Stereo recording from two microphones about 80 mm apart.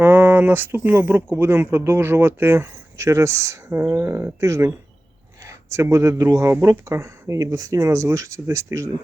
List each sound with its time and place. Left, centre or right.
0.0 s speech: right